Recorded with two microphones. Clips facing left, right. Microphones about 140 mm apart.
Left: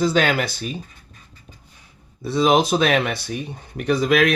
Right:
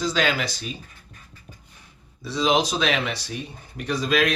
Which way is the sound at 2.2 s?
55° left (ahead or behind).